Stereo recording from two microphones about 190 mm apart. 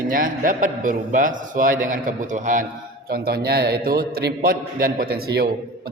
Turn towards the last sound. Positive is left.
turn(degrees=-55)  # may be behind; listen again after turning